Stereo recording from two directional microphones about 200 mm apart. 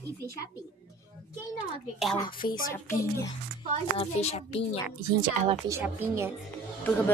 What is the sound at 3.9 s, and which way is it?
Speech, 30° left (ahead or behind).